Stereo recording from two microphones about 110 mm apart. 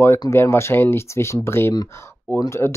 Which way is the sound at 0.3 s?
25° left (ahead or behind).